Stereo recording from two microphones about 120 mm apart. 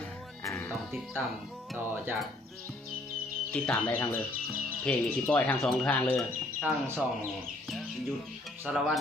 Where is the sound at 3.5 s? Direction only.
15° left (ahead or behind).